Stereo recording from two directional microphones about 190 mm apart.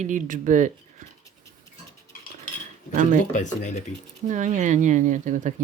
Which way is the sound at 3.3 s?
40° left (ahead or behind).